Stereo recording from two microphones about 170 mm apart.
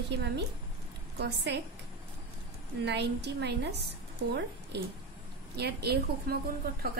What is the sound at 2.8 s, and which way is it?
A woman's voice, 85° right.